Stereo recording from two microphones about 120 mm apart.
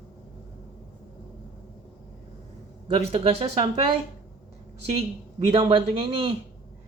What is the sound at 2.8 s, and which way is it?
Speech, 55° right (ahead or behind).